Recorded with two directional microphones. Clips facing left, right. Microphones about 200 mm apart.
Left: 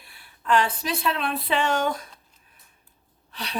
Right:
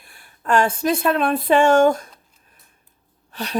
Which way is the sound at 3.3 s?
45° right (ahead or behind).